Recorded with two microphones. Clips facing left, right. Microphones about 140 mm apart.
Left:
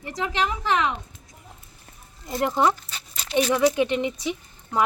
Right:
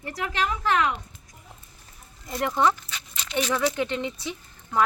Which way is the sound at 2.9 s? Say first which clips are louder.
Even; 35° left (ahead or behind).